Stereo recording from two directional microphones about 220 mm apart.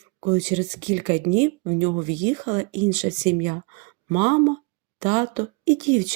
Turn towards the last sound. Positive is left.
turn(degrees=-30)  # may be behind; listen again after turning